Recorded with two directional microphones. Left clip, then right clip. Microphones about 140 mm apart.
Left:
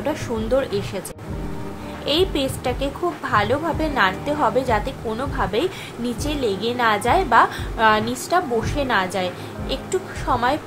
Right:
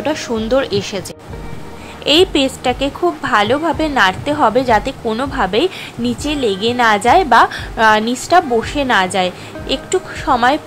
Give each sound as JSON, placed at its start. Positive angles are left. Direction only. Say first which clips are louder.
{"t": 0.0, "sound": "speech", "louder": "right 6 dB", "side_deg": -40}
{"t": 2.0, "sound": "a woman's voice", "louder": "right 8 dB", "side_deg": -50}